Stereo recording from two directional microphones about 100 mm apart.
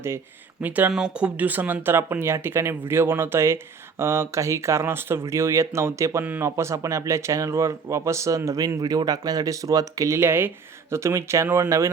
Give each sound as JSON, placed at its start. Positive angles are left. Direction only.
{"t": 0.6, "sound": "speech", "side_deg": -15}
{"t": 10.2, "sound": "speech", "side_deg": -20}